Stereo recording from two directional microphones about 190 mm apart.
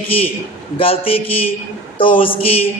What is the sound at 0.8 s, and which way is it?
Speech, 30° left (ahead or behind).